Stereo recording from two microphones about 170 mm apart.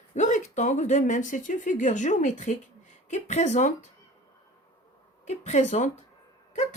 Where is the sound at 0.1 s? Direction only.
45° left (ahead or behind).